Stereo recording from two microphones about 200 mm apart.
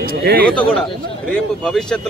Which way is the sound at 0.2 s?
50° right (ahead or behind).